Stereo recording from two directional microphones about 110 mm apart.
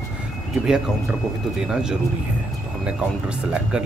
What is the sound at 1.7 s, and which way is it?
Speech, 5° right (ahead or behind).